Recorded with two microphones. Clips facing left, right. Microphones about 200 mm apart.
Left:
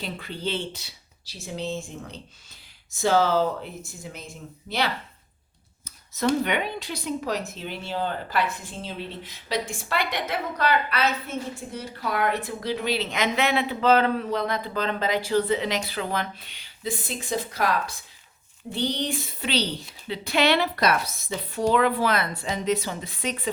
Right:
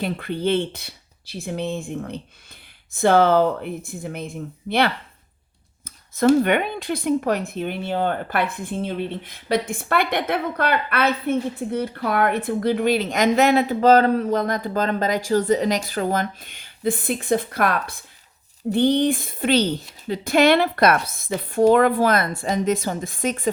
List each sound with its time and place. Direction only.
0.0 s speech: 55° right (ahead or behind)